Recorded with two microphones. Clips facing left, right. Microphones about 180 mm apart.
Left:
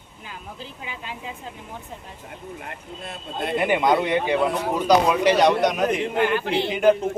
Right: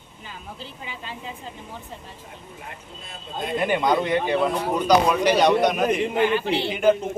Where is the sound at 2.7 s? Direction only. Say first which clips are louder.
Left 5 dB; 65° left (ahead or behind).